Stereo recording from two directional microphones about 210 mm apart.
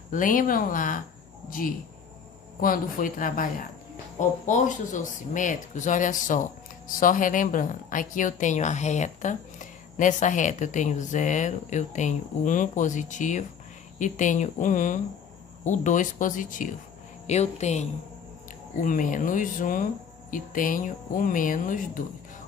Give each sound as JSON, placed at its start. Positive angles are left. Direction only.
{"t": 0.1, "sound": "a woman's voice", "side_deg": 40}
{"t": 2.6, "sound": "a woman's voice", "side_deg": 40}